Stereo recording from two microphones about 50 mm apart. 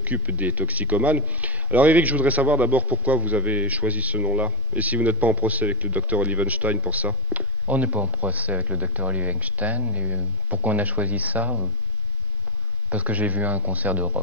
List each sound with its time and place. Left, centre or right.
0.0 s speech: right
7.3 s a sound: right
8.0 s speech: right
12.9 s speech: right